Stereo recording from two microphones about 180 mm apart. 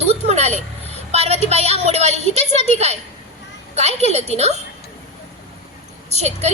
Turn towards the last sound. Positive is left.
turn(degrees=-35)  # may be behind; listen again after turning